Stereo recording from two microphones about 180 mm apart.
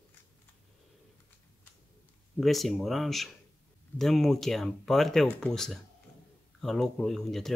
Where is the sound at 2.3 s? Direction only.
Centre (ahead or behind).